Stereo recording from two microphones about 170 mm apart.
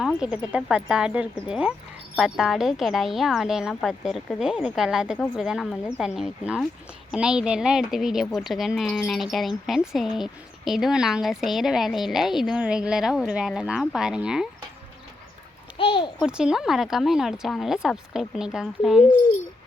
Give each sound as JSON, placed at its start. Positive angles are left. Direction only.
{"t": 0.0, "sound": "a woman's voice", "side_deg": -5}
{"t": 15.8, "sound": "a child's voice", "side_deg": 30}
{"t": 16.2, "sound": "a woman's voice", "side_deg": -5}